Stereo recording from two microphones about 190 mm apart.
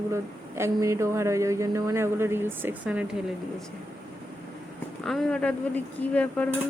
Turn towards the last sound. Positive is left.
turn(degrees=5)  # may be behind; listen again after turning